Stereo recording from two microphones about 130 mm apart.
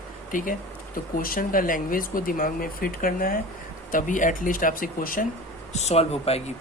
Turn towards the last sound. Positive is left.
turn(degrees=50)  # may be behind; listen again after turning